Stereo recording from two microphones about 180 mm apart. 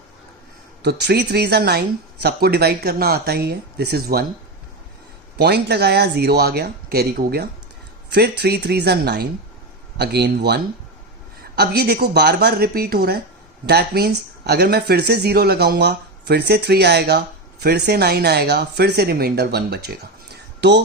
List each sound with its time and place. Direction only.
0.8 s speech: 65° right (ahead or behind)
5.4 s speech: 65° right (ahead or behind)
20.3 s a sound: 70° right (ahead or behind)